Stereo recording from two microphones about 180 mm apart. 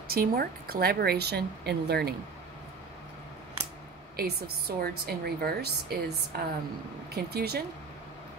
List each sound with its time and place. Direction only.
0.1 s a woman's voice: 55° right (ahead or behind)
4.2 s a woman's voice: 60° right (ahead or behind)